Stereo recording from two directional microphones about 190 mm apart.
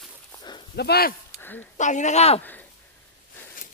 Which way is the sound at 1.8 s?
40° left (ahead or behind).